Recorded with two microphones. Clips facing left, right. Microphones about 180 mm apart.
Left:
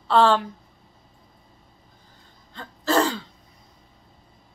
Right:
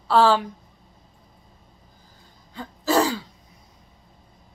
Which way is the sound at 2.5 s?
10° right (ahead or behind).